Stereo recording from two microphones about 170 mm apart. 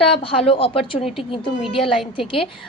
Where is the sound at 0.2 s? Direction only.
30° left (ahead or behind).